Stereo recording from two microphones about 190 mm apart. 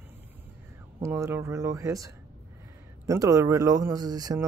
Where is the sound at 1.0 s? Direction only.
15° right (ahead or behind).